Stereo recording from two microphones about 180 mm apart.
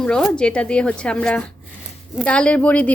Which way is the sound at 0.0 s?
5° left (ahead or behind).